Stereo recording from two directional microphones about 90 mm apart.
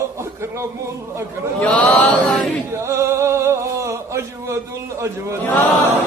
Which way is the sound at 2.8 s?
30° right (ahead or behind).